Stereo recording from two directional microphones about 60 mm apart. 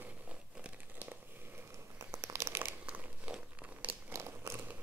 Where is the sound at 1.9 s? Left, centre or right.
Right.